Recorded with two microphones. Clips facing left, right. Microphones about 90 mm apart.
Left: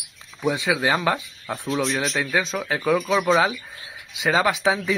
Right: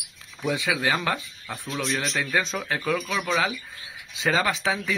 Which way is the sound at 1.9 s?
5° left (ahead or behind).